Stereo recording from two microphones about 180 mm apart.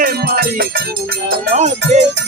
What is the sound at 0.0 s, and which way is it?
Music, 55° right (ahead or behind).